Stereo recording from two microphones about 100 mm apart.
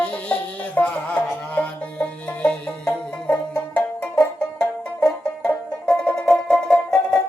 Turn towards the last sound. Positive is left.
turn(degrees=10)  # may be behind; listen again after turning